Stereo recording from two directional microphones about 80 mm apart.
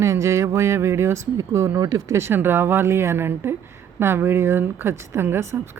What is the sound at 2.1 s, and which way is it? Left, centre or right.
Speech, right.